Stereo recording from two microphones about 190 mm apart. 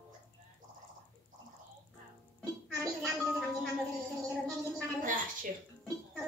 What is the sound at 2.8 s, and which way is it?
Gargling, centre (ahead or behind).